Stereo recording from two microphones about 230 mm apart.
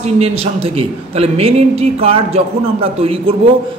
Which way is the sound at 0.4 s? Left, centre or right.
Right.